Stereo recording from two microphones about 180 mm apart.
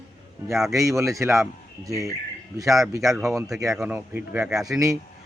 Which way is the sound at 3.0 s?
Centre (ahead or behind).